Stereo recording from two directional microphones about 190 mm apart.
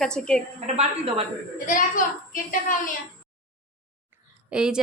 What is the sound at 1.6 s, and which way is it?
A woman's voice, 45° left (ahead or behind).